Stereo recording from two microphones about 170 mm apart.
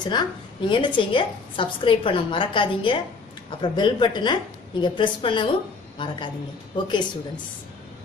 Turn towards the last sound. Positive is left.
turn(degrees=25)  # may be behind; listen again after turning